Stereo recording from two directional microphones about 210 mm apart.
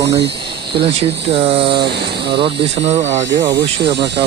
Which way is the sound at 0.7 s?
25° right (ahead or behind).